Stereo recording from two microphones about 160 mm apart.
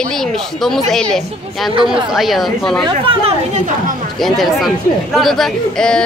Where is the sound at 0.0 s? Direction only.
Centre (ahead or behind).